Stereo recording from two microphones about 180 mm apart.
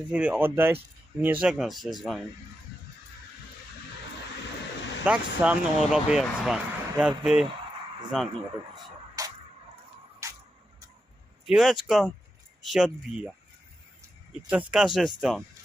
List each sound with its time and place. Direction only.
0.1 s speech: 5° right (ahead or behind)
5.0 s speech: 10° right (ahead or behind)
8.7 s a sound: 20° right (ahead or behind)
10.2 s music: 15° right (ahead or behind)
11.4 s speech: 5° right (ahead or behind)
14.5 s speech: 5° right (ahead or behind)